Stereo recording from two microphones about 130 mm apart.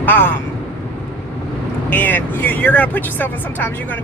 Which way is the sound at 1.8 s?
15° left (ahead or behind).